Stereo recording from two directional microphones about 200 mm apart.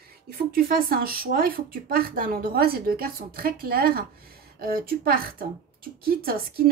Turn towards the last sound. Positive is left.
turn(degrees=-50)  # may be behind; listen again after turning